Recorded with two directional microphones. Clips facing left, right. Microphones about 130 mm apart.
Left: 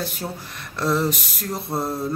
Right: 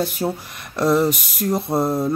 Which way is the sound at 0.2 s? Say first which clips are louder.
Right 7 dB; 20° right (ahead or behind).